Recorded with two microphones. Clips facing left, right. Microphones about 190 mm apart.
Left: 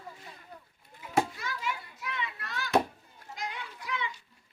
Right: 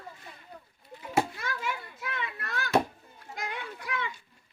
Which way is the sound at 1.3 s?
55° right (ahead or behind).